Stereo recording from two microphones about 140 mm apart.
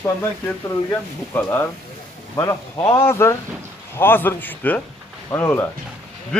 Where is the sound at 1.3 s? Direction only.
15° left (ahead or behind).